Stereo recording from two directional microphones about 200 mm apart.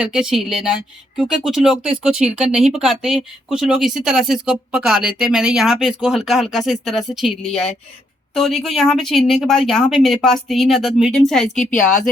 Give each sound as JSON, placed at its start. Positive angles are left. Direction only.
{"t": 0.0, "sound": "speech", "side_deg": -5}
{"t": 11.5, "sound": "a woman's voice", "side_deg": 40}